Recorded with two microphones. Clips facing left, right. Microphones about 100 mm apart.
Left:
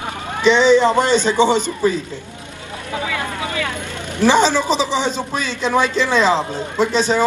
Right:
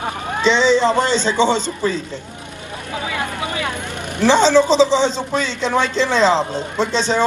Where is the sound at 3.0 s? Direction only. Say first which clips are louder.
Right 1 dB; 20° right (ahead or behind).